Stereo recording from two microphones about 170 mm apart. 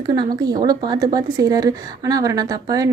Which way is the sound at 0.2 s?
25° right (ahead or behind).